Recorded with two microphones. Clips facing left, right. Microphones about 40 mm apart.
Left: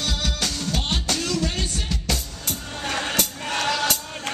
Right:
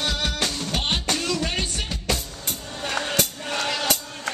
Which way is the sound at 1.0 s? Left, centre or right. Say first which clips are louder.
Right 1 dB; right.